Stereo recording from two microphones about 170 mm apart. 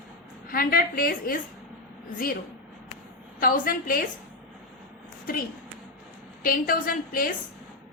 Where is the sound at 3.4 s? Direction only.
55° left (ahead or behind).